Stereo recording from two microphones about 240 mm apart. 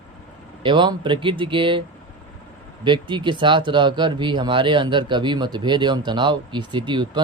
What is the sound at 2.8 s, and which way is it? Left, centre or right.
Speech, centre.